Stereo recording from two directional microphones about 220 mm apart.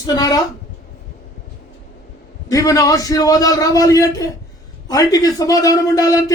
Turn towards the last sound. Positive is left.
turn(degrees=15)  # may be behind; listen again after turning